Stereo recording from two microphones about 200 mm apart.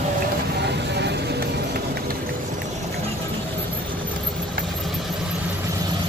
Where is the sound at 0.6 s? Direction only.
60° right (ahead or behind).